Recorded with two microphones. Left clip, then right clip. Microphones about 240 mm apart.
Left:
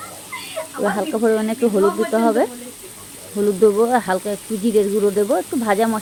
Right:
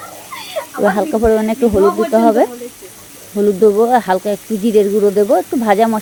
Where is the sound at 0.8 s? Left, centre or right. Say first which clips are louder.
Right 6 dB; right.